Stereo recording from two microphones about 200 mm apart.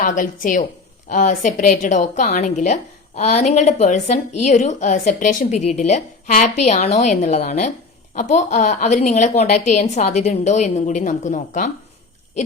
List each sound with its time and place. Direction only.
0.0 s a woman's voice: 40° left (ahead or behind)